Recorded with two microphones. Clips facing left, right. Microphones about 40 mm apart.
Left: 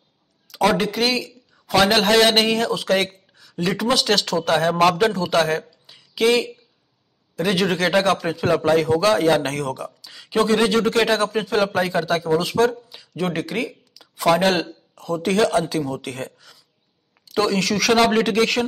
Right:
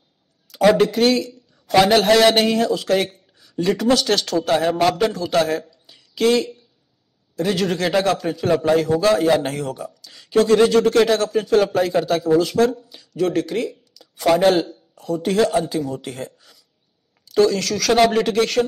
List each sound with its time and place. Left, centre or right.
0.5 s a man's voice: centre
3.3 s speech: centre
4.9 s speech: centre
10.0 s speech: centre
10.9 s speech: centre
11.2 s a man's voice: left
11.6 s speech: centre
12.9 s speech: left; by 15.5 s centre
17.3 s speech: centre